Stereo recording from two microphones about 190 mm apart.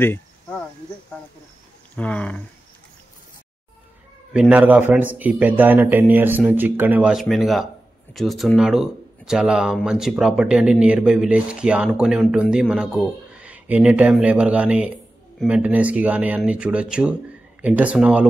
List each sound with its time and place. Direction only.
0.0 s insect: 10° left (ahead or behind)
2.0 s speech: 5° left (ahead or behind)
4.3 s a man's voice: 5° right (ahead or behind)